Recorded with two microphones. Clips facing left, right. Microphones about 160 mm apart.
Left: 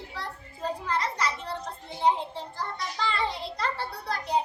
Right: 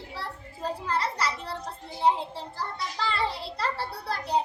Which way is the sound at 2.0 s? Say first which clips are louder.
Even; 5° right (ahead or behind).